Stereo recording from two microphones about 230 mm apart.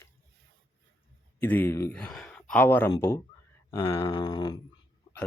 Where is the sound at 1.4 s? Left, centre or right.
Centre.